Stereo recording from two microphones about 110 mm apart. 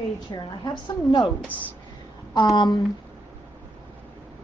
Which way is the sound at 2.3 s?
40° left (ahead or behind).